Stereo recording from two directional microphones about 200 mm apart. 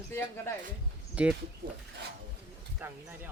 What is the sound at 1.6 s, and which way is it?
Speech, 50° right (ahead or behind).